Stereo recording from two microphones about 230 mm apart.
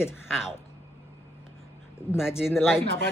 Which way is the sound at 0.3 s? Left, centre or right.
Centre.